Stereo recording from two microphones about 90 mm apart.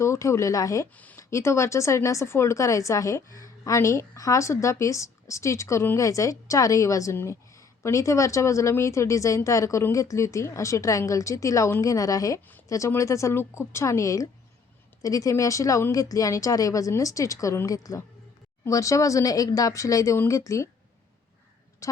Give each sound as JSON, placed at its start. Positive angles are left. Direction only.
{"t": 0.0, "sound": "a woman's voice", "side_deg": 35}
{"t": 0.9, "sound": "speech", "side_deg": 20}
{"t": 1.3, "sound": "a woman's voice", "side_deg": 30}
{"t": 7.2, "sound": "a sound", "side_deg": 35}
{"t": 7.9, "sound": "a woman's voice", "side_deg": 35}